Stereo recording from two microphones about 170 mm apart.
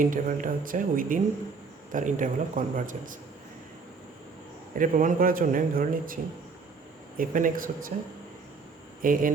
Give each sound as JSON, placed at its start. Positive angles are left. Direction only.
{"t": 0.0, "sound": "speech", "side_deg": -55}
{"t": 4.8, "sound": "speech", "side_deg": -50}
{"t": 7.2, "sound": "speech", "side_deg": -55}
{"t": 9.0, "sound": "speech", "side_deg": -55}